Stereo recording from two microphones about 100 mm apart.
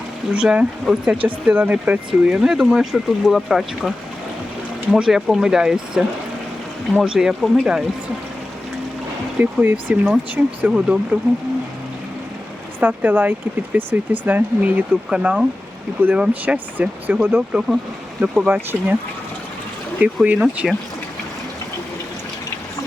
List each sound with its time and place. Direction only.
0.3 s speech: 10° right (ahead or behind)
7.0 s speech: 5° right (ahead or behind)
9.4 s speech: 20° right (ahead or behind)
12.8 s speech: 20° right (ahead or behind)
20.2 s speech: 15° right (ahead or behind)